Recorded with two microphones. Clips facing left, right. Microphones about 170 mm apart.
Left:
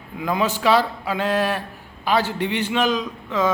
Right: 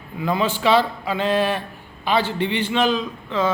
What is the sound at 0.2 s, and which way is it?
A man's voice, 10° left (ahead or behind).